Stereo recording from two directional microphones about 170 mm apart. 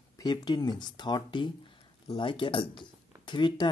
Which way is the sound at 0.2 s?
25° left (ahead or behind).